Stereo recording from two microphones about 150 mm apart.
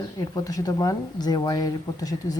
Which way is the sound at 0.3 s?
25° left (ahead or behind).